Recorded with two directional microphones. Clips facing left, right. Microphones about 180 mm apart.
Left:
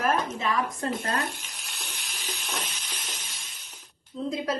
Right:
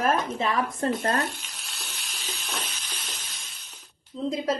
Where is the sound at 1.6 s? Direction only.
15° left (ahead or behind).